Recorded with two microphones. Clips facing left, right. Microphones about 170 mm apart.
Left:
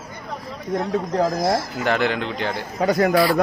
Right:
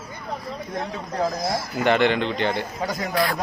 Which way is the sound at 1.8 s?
5° left (ahead or behind).